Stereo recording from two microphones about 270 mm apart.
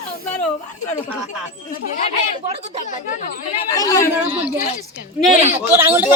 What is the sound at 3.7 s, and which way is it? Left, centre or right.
Speech, centre.